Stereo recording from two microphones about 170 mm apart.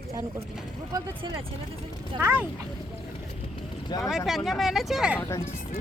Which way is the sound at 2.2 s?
15° right (ahead or behind).